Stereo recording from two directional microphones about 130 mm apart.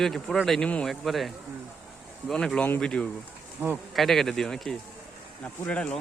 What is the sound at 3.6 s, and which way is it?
Speech, 15° right (ahead or behind).